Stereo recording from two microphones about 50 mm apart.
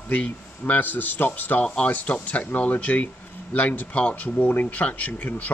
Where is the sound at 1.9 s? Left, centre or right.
Left.